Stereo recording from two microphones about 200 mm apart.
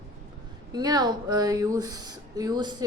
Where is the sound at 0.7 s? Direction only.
20° right (ahead or behind).